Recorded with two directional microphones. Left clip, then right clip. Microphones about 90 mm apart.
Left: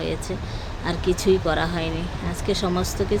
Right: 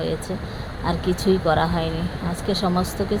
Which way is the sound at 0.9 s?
15° right (ahead or behind).